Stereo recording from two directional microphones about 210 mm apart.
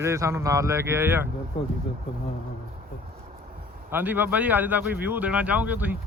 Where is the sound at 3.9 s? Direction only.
10° right (ahead or behind).